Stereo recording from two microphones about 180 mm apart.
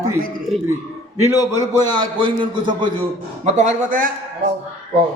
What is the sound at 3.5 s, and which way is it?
Speech, 40° right (ahead or behind).